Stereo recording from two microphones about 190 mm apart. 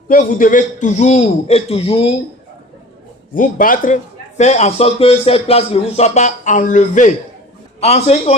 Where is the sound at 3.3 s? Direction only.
45° left (ahead or behind).